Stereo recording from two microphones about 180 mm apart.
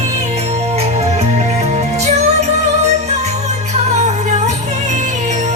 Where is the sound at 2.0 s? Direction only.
40° right (ahead or behind).